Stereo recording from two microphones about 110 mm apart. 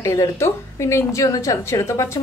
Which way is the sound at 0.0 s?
25° left (ahead or behind).